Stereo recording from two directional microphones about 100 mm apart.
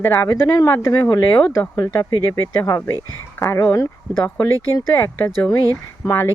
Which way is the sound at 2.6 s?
30° left (ahead or behind).